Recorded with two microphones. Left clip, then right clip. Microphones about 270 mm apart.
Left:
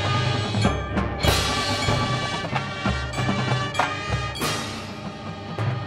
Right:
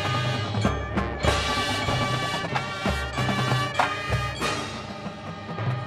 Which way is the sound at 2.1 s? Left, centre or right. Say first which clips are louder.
Left 1 dB; left.